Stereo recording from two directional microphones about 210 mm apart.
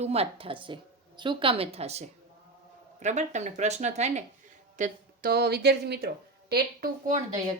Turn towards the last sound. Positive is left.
turn(degrees=-35)  # may be behind; listen again after turning